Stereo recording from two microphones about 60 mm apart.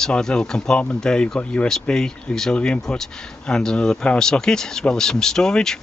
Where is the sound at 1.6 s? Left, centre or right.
Centre.